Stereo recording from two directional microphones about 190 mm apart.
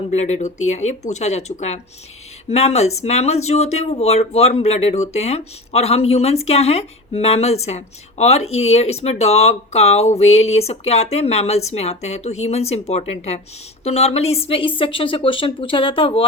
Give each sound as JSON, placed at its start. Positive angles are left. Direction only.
{"t": 0.1, "sound": "a woman's voice", "side_deg": 35}